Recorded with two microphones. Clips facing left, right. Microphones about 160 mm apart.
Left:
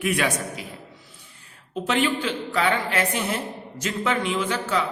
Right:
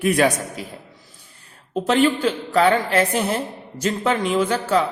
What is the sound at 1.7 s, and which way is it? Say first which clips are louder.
A man's voice: right 6 dB; 40° right (ahead or behind).